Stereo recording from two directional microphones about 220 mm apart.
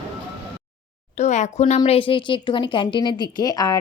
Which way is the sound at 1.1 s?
30° left (ahead or behind).